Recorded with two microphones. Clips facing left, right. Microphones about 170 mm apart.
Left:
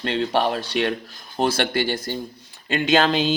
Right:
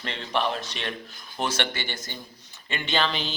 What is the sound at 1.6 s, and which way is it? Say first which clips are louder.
A man's voice: left 10 dB; 35° left (ahead or behind).